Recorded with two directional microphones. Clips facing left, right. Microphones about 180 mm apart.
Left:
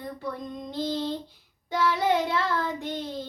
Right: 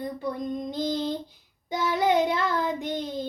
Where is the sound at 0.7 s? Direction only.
15° right (ahead or behind).